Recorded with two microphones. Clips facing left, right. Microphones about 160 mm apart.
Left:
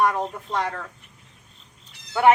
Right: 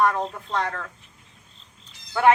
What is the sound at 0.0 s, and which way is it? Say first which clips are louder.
Speech: even; 15° left (ahead or behind).